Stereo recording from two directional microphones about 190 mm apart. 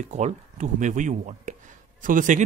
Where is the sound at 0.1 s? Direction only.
40° right (ahead or behind).